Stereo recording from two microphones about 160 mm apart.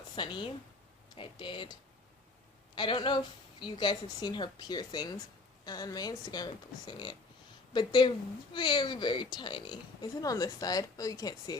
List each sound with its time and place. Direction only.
0.2 s speech: 30° left (ahead or behind)
2.7 s speech: 30° left (ahead or behind)